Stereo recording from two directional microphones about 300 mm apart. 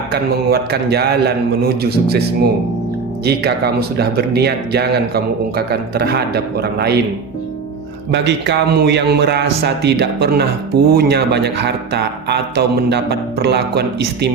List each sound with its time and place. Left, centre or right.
0.1 s speech: right
8.1 s speech: right